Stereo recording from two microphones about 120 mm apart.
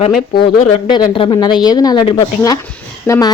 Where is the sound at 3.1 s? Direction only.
25° left (ahead or behind).